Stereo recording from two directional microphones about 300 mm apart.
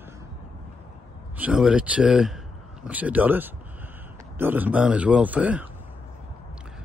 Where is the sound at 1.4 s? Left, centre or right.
Centre.